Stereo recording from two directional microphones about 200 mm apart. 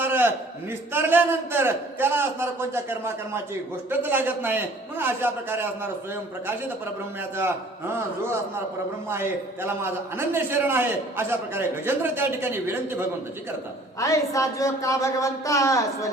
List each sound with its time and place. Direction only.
0.0 s a sound: 10° right (ahead or behind)
0.9 s a man's voice: 10° right (ahead or behind)
7.3 s a man's voice: 10° right (ahead or behind)
9.6 s a man's voice: 10° right (ahead or behind)
14.0 s speech: 15° left (ahead or behind)